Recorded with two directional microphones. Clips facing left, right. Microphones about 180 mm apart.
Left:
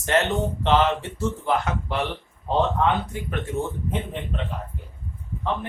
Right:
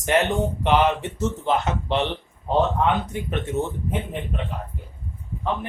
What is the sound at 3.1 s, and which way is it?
Speech, 20° right (ahead or behind).